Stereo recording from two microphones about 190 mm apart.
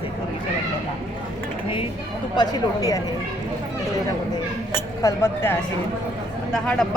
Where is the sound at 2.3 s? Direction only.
20° left (ahead or behind).